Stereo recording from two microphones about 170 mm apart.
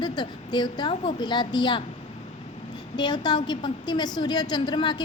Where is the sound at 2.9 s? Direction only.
25° left (ahead or behind).